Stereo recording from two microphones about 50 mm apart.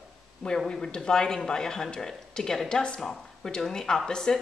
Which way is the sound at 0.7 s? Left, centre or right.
Centre.